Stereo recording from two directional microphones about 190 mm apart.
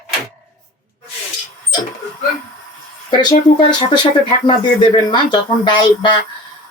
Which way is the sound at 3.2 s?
20° left (ahead or behind).